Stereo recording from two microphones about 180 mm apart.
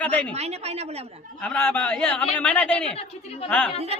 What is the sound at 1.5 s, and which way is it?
A man's voice, 10° left (ahead or behind).